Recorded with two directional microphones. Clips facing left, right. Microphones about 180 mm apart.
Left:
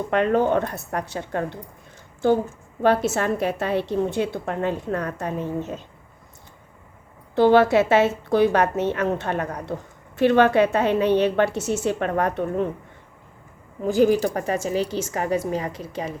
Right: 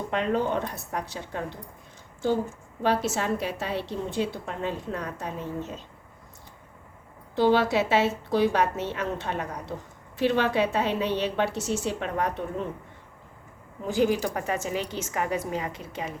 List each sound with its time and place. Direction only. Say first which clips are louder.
0.1 s a woman's voice: left 7 dB; 55° left (ahead or behind)
2.8 s a woman's voice: left 6 dB; 55° left (ahead or behind)
7.3 s a woman's voice: left 6 dB; 55° left (ahead or behind)
13.8 s a woman's voice: left 6 dB; 45° left (ahead or behind)